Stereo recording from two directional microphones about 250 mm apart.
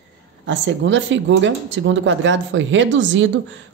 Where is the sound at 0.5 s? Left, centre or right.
Right.